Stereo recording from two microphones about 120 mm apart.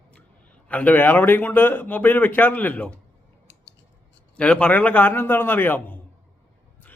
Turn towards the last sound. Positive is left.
turn(degrees=15)  # may be behind; listen again after turning